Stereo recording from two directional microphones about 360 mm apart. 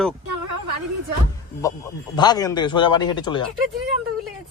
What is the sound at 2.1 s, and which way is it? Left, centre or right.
Speech, centre.